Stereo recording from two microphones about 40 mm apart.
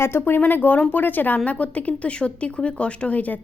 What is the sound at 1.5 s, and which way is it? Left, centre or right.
Speech, left.